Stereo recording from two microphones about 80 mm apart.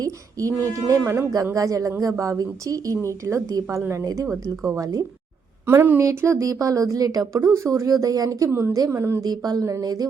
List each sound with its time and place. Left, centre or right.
0.0 s a woman's voice: right
4.3 s speech: right
4.8 s a woman's voice: right
5.6 s speech: right
6.0 s a woman's voice: right
8.4 s speech: right
9.2 s a woman's voice: right